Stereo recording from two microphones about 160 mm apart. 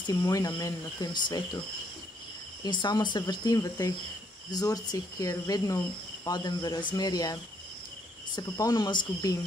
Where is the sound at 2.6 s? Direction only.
30° left (ahead or behind).